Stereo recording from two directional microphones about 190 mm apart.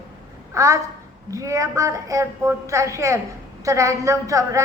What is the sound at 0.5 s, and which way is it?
A woman's voice, 15° right (ahead or behind).